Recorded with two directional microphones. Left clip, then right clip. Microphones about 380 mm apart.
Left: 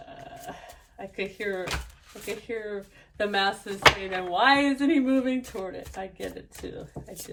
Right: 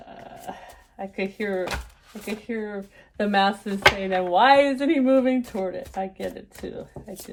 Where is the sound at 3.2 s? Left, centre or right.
Right.